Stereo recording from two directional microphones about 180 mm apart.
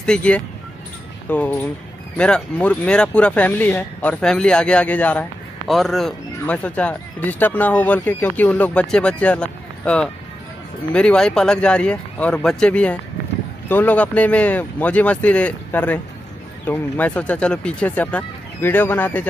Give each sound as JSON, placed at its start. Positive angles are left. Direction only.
{"t": 0.0, "sound": "speech", "side_deg": 5}